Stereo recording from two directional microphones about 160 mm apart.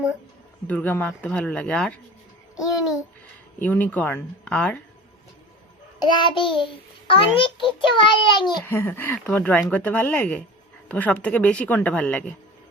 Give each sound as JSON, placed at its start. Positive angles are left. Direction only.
{"t": 0.7, "sound": "speech", "side_deg": 10}
{"t": 3.6, "sound": "speech", "side_deg": 10}
{"t": 6.0, "sound": "child singing", "side_deg": 30}
{"t": 7.1, "sound": "a child's voice", "side_deg": 35}
{"t": 8.6, "sound": "speech", "side_deg": 15}